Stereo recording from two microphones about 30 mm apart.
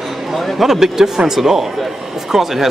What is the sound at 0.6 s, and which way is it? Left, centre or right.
Speech, centre.